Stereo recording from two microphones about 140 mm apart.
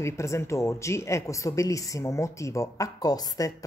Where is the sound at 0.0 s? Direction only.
20° left (ahead or behind).